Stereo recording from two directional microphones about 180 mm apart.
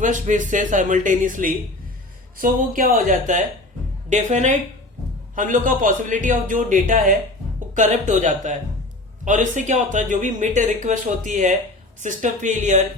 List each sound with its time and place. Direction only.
0.0 s a man's voice: 45° right (ahead or behind)